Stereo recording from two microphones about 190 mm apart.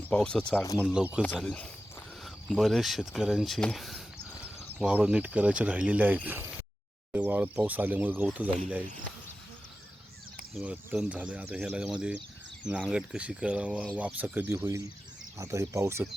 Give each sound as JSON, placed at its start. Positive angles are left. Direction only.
{"t": 0.1, "sound": "speech", "side_deg": 5}
{"t": 0.6, "sound": "speech", "side_deg": 15}
{"t": 0.9, "sound": "speech", "side_deg": -5}
{"t": 1.2, "sound": "speech", "side_deg": 5}
{"t": 10.5, "sound": "speech", "side_deg": -5}